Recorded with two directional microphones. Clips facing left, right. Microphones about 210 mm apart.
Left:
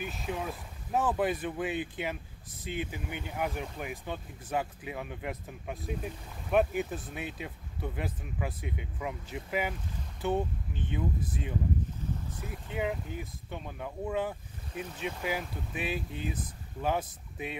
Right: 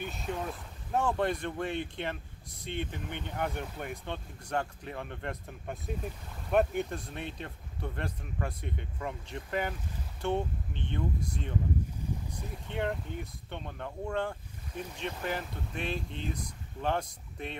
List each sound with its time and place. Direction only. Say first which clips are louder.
0.0 s speech: even; 5° left (ahead or behind)
12.6 s speech: even; 5° left (ahead or behind)